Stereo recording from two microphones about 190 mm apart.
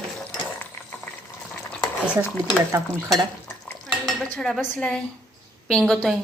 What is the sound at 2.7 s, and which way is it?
Stir, 20° right (ahead or behind).